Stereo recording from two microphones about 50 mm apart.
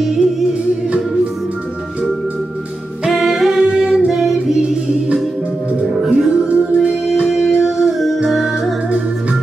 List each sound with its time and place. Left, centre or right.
0.0 s music: centre
3.1 s music: centre
6.0 s music: right
7.2 s music: centre